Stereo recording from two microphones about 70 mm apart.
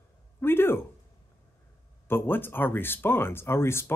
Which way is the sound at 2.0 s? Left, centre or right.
Left.